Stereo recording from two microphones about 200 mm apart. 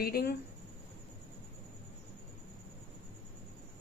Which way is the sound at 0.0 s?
50° left (ahead or behind).